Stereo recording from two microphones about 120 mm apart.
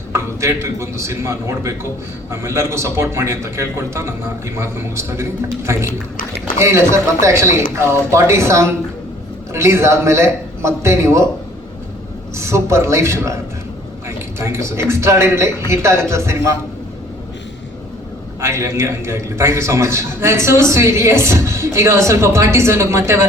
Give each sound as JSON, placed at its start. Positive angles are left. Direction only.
{"t": 0.1, "sound": "a man's voice", "side_deg": -25}
{"t": 12.4, "sound": "a man's voice", "side_deg": -25}
{"t": 18.3, "sound": "a man's voice", "side_deg": -25}